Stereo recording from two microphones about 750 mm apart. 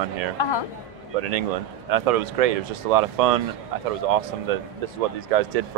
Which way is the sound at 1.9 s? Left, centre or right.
Right.